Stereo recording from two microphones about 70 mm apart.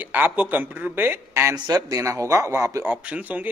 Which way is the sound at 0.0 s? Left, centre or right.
Right.